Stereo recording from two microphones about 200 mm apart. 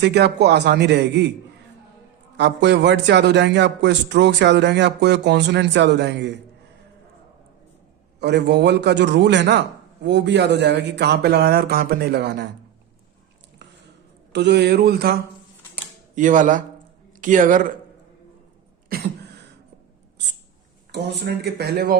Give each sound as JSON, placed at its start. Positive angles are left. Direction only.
{"t": 0.0, "sound": "a man's voice", "side_deg": -55}
{"t": 2.4, "sound": "a man's voice", "side_deg": -60}
{"t": 8.2, "sound": "a man's voice", "side_deg": -60}
{"t": 14.3, "sound": "speech", "side_deg": -60}
{"t": 16.1, "sound": "speech", "side_deg": -40}
{"t": 20.9, "sound": "speech", "side_deg": -55}